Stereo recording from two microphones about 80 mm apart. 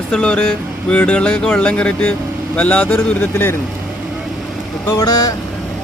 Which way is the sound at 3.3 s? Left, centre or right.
Left.